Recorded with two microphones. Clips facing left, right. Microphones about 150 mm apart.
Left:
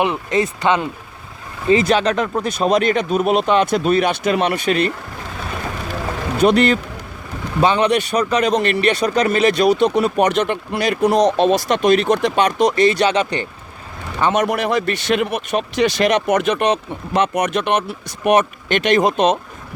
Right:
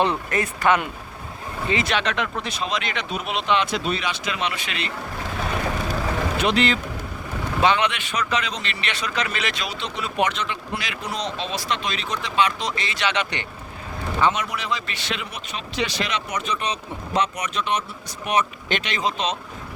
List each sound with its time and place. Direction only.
0.0 s speech: 20° left (ahead or behind)
1.6 s speech: 35° left (ahead or behind)
6.4 s speech: 50° left (ahead or behind)
7.6 s speech: 40° left (ahead or behind)
14.2 s a man's voice: 50° left (ahead or behind)